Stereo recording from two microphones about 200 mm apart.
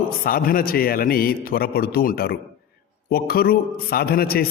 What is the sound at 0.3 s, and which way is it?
A man's voice, 45° left (ahead or behind).